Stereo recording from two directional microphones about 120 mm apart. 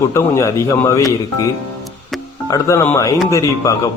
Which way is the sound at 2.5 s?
25° left (ahead or behind).